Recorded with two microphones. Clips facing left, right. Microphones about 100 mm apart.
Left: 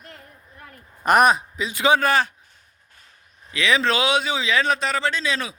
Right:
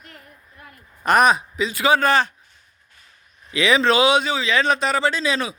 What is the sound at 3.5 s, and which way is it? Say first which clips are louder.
Speech: right 4 dB; 5° right (ahead or behind).